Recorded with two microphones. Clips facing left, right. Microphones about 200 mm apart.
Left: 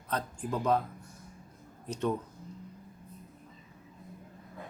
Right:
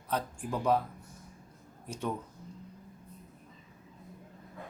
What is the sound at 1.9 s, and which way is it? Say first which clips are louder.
Speech: left 4 dB; 10° right (ahead or behind).